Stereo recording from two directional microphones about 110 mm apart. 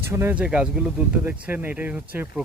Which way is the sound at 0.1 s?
20° right (ahead or behind).